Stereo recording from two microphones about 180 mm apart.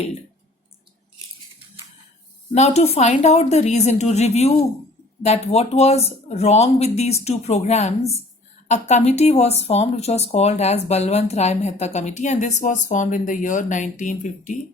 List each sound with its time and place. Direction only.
2.5 s speech: 35° left (ahead or behind)